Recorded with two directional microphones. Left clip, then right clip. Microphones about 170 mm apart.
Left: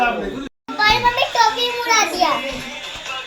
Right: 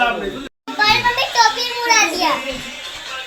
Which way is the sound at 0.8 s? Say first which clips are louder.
Even; 90° left.